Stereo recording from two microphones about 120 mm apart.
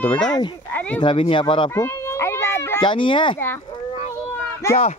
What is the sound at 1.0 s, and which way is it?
Speech, 45° left (ahead or behind).